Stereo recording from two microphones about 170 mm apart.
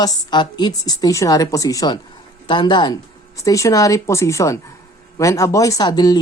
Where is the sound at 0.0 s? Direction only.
25° left (ahead or behind).